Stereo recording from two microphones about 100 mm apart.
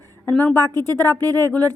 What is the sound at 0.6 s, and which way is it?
Speech, 40° right (ahead or behind).